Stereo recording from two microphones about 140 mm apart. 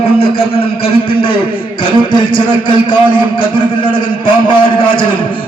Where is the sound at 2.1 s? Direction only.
35° left (ahead or behind).